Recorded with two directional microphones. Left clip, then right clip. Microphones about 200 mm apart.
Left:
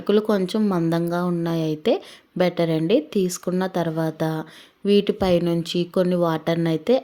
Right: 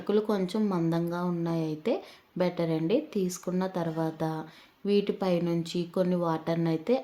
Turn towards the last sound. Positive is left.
turn(degrees=35)  # may be behind; listen again after turning